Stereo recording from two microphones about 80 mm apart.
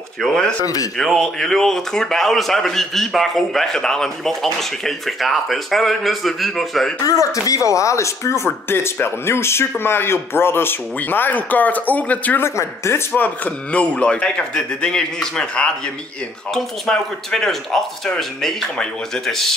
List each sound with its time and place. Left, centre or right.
0.2 s speech: centre
7.1 s speech: left; by 12.4 s centre
12.4 s speech: left; by 19.5 s centre